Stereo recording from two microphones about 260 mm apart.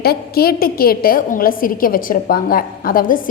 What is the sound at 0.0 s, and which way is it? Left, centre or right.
A woman's voice, left.